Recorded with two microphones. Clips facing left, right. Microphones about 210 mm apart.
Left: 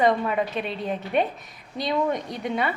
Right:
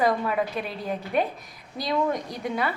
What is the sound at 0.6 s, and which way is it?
Speech, 25° left (ahead or behind).